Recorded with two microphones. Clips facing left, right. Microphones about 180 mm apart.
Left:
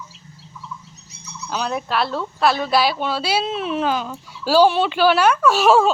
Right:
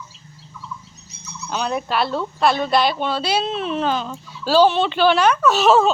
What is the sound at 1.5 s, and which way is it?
Speech, centre (ahead or behind).